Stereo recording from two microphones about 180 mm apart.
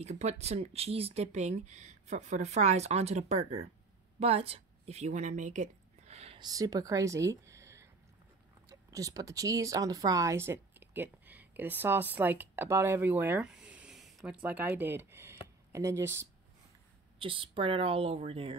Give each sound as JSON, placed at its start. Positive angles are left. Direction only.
{"t": 0.0, "sound": "a woman's voice", "side_deg": -40}
{"t": 6.4, "sound": "speech", "side_deg": -20}
{"t": 17.2, "sound": "speech", "side_deg": -30}